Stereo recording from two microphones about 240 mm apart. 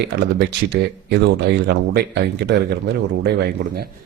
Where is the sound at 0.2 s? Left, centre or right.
Right.